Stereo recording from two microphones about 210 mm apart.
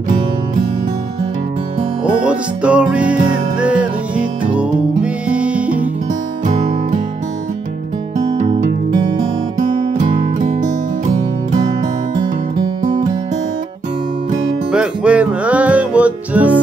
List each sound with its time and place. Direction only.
2.0 s music: 5° right (ahead or behind)
8.4 s music: 35° right (ahead or behind)
14.7 s music: 5° right (ahead or behind)